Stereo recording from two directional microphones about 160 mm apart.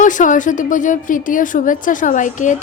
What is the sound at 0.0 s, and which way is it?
A woman's voice, 55° left (ahead or behind).